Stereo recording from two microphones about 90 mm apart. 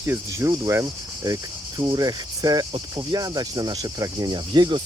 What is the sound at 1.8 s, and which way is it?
Speech, 50° right (ahead or behind).